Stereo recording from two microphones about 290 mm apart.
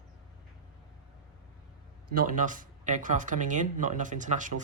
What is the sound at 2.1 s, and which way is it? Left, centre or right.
Speech, right.